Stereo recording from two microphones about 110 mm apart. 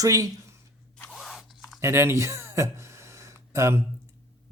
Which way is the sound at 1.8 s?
25° right (ahead or behind).